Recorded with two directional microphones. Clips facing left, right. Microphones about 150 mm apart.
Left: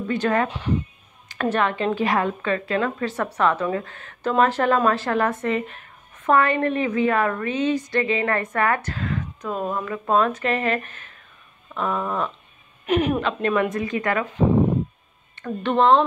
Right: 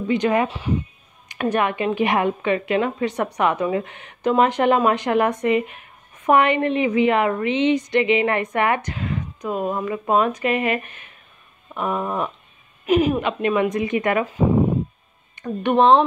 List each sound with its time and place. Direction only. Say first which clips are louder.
0.1 s a woman's voice: right 3 dB; 15° right (ahead or behind)
12.8 s a woman's voice: right 3 dB; 5° right (ahead or behind)
15.3 s speech: right 3 dB; 15° right (ahead or behind)